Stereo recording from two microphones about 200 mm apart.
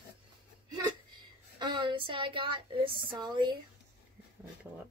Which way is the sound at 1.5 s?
25° right (ahead or behind).